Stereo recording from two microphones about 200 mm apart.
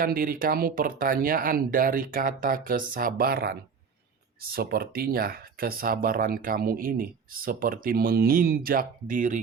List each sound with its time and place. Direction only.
0.0 s speech: 45° right (ahead or behind)